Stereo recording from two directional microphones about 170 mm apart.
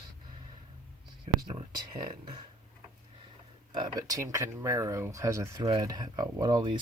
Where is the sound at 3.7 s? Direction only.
25° right (ahead or behind).